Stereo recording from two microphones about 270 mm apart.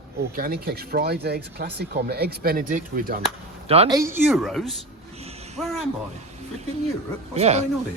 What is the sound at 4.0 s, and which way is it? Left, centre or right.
A woman's voice, centre.